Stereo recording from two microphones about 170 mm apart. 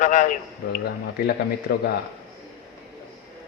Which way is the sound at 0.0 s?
50° left (ahead or behind).